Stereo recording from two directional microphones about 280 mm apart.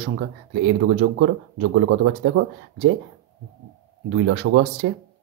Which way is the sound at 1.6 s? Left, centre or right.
Right.